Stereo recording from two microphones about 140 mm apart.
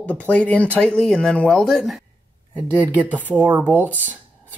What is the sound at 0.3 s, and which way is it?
Speech, 10° left (ahead or behind).